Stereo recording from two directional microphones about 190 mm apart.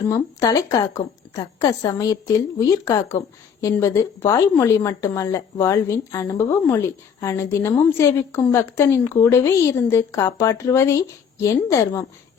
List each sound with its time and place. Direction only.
0.1 s a woman's voice: 20° left (ahead or behind)